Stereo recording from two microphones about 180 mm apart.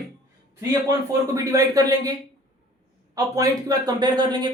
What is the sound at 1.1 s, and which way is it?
Speech, 20° right (ahead or behind).